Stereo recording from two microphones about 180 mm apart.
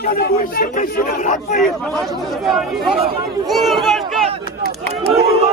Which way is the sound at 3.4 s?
Centre (ahead or behind).